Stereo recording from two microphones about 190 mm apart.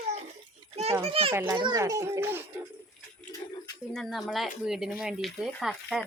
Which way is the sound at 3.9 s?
Centre (ahead or behind).